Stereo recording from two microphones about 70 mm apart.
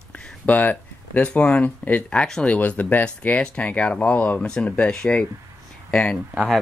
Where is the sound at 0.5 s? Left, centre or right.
Left.